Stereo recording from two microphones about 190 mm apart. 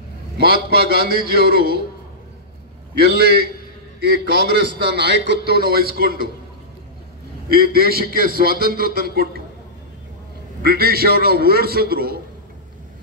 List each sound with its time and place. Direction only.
0.4 s a man's voice: 55° right (ahead or behind)
2.9 s a man's voice: 55° right (ahead or behind)
7.4 s a man's voice: 55° right (ahead or behind)
10.6 s a man's voice: 55° right (ahead or behind)